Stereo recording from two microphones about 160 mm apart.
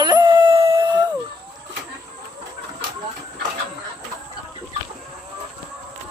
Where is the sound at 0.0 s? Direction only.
25° right (ahead or behind).